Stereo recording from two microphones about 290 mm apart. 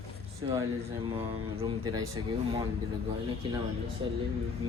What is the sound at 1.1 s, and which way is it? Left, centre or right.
Speech, centre.